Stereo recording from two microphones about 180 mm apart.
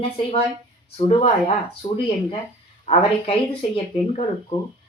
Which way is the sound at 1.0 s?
35° left (ahead or behind).